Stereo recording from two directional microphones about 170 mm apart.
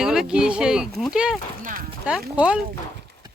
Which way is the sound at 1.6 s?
55° right (ahead or behind).